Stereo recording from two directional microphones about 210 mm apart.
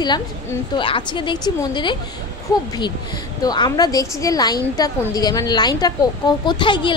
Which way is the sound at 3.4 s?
20° left (ahead or behind).